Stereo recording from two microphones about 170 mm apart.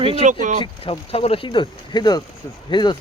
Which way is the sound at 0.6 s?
35° left (ahead or behind).